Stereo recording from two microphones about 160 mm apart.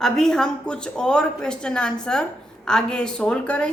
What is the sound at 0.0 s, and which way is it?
A woman's voice, 5° left (ahead or behind).